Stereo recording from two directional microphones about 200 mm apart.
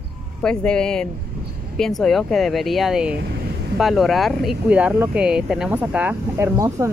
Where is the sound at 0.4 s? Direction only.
5° left (ahead or behind).